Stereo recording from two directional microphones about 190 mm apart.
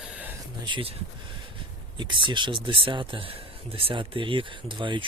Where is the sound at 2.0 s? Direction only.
25° right (ahead or behind).